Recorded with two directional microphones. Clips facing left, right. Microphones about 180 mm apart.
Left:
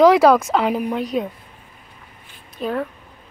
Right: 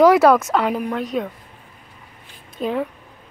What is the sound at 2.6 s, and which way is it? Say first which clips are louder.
Speech: right 1 dB; 10° right (ahead or behind).